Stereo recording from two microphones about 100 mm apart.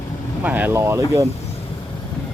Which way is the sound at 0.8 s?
30° right (ahead or behind).